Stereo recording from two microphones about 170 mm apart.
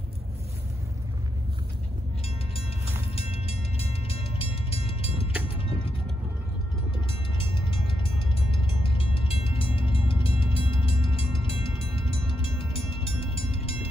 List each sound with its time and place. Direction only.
3.2 s train: 35° left (ahead or behind)
5.6 s vehicle: 30° left (ahead or behind)
7.3 s train: 30° left (ahead or behind)